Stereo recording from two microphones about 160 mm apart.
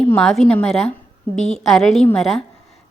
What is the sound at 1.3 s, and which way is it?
Speech, 45° left (ahead or behind).